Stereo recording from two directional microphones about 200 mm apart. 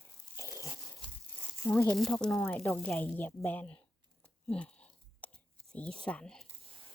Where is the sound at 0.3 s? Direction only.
15° left (ahead or behind).